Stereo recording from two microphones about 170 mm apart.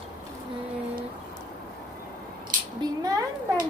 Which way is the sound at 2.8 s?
20° right (ahead or behind).